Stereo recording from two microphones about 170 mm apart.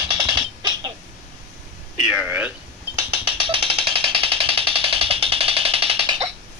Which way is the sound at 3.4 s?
35° right (ahead or behind).